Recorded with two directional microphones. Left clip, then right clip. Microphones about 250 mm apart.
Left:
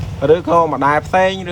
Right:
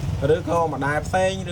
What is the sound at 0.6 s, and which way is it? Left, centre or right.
Speech, left.